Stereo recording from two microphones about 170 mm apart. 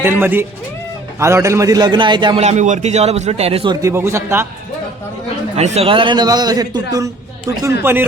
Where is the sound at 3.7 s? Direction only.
20° right (ahead or behind).